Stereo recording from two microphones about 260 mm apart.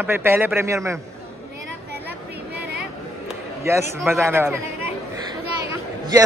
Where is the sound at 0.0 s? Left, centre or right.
Centre.